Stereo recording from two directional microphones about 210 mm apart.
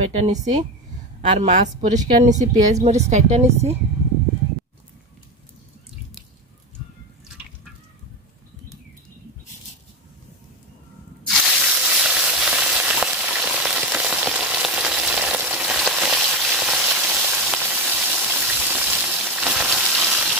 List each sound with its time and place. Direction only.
0.0 s speech: 35° right (ahead or behind)
11.2 s frying: centre (ahead or behind)